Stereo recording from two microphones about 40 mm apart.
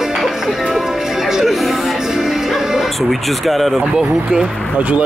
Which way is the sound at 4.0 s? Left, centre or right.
Centre.